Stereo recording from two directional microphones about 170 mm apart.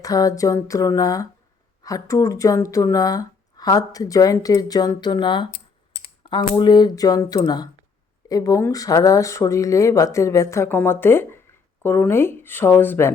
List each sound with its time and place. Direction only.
0.0 s speech: 20° left (ahead or behind)